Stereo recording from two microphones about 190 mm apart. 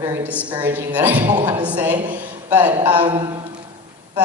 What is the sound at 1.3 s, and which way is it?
Speech, 25° right (ahead or behind).